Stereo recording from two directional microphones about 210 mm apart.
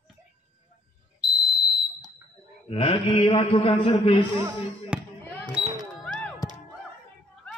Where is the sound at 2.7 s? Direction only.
25° left (ahead or behind).